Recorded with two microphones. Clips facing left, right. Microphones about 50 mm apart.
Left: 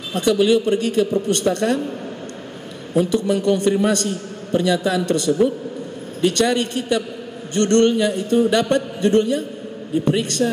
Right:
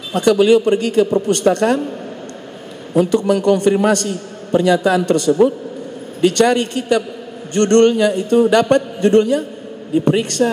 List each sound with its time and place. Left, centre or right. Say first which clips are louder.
0.1 s a man's voice: right 4 dB; right
3.0 s a man's voice: right 4 dB; right